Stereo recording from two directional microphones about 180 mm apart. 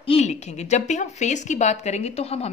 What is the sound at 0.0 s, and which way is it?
Speech, 35° left (ahead or behind).